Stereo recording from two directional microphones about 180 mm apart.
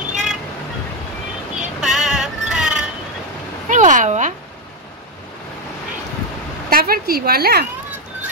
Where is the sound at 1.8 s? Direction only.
5° right (ahead or behind).